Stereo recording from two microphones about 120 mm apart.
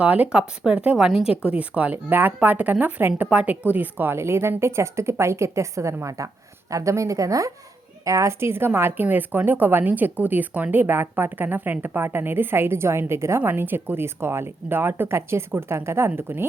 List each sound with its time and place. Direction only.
0.0 s a woman's voice: 10° right (ahead or behind)